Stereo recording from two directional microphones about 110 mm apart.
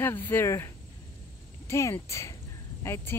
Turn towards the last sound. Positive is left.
turn(degrees=20)  # may be behind; listen again after turning